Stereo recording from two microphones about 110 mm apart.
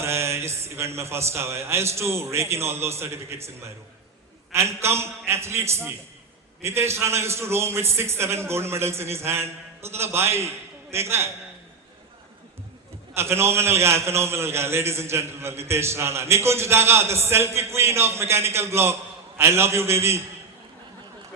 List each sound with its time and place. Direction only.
0.0 s a man's voice: 25° right (ahead or behind)
13.1 s a man's voice: 25° right (ahead or behind)